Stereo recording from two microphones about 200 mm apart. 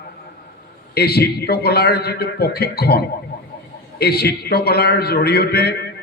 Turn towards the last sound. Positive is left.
turn(degrees=50)  # may be behind; listen again after turning